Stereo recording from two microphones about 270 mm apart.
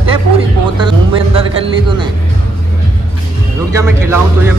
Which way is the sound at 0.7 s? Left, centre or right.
Centre.